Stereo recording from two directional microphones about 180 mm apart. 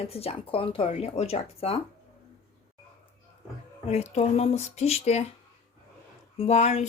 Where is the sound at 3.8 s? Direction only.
35° left (ahead or behind).